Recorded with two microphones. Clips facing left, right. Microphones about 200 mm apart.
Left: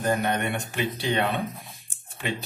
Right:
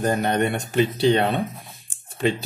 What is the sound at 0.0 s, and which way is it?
Speech, 35° right (ahead or behind).